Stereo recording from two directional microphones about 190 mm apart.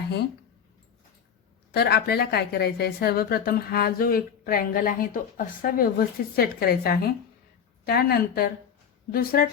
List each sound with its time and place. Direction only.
1.7 s a woman's voice: 55° left (ahead or behind)